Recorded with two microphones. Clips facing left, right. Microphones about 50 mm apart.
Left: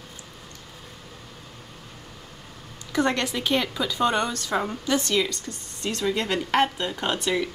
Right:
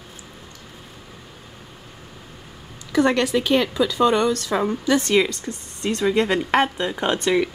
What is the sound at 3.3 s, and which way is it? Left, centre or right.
Speech, centre.